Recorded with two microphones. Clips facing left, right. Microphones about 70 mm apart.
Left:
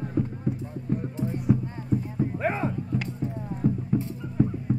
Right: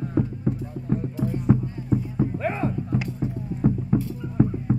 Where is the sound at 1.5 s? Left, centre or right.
Right.